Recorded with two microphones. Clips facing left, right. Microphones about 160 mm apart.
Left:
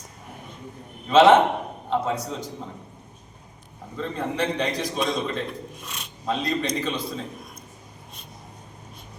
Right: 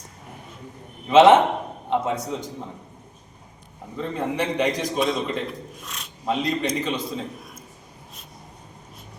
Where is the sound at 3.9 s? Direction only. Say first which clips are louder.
Right 2 dB; 15° right (ahead or behind).